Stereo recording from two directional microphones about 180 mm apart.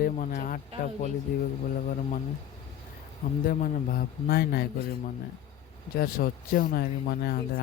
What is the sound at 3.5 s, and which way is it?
Speech, 50° left (ahead or behind).